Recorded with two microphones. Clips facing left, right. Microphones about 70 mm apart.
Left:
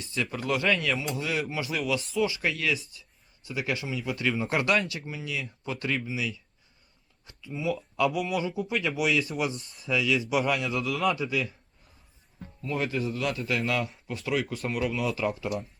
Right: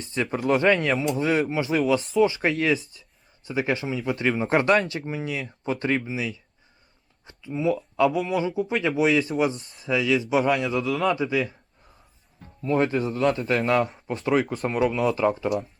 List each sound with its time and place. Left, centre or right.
0.0 s speech: right
9.6 s speech: centre
9.8 s speech: right
12.6 s speech: right